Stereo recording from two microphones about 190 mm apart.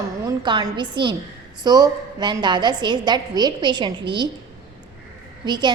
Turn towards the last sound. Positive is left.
turn(degrees=-20)  # may be behind; listen again after turning